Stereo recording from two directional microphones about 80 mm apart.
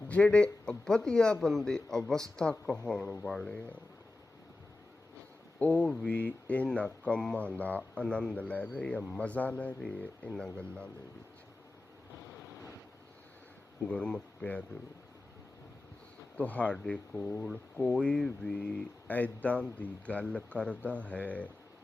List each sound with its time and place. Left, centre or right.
0.1 s speech: centre
5.5 s speech: centre
13.8 s speech: centre
16.4 s speech: centre